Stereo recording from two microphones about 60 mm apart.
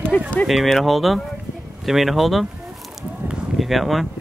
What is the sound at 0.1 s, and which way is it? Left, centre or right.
Speech, left.